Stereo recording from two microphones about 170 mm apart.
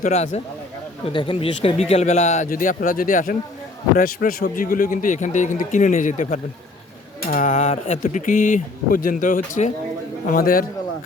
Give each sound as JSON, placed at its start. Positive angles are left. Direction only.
{"t": 0.0, "sound": "speech", "side_deg": 40}
{"t": 10.2, "sound": "a man's voice", "side_deg": 60}